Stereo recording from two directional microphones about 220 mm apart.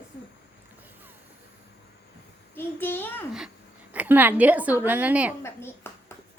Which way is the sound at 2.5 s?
10° left (ahead or behind).